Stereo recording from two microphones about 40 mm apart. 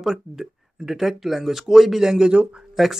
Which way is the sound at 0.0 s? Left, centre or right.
Centre.